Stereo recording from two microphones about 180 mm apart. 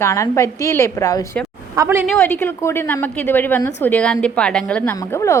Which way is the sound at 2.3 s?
15° left (ahead or behind).